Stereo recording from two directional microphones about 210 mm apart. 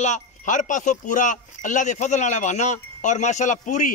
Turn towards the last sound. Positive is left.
turn(degrees=35)  # may be behind; listen again after turning